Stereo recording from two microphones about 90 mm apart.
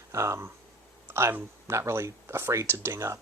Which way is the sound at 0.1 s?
30° right (ahead or behind).